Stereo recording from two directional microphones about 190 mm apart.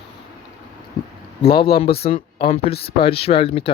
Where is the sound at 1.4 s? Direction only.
30° left (ahead or behind).